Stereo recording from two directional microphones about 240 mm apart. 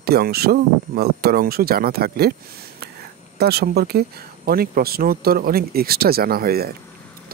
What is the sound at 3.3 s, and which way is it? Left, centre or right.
Speech, right.